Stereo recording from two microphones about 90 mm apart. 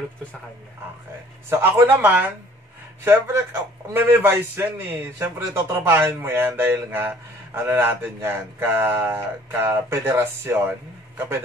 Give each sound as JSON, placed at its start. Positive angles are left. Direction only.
{"t": 1.5, "sound": "a man's voice", "side_deg": -25}
{"t": 3.0, "sound": "a man's voice", "side_deg": -30}